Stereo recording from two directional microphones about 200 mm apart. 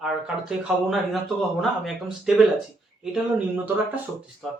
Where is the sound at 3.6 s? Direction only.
10° right (ahead or behind).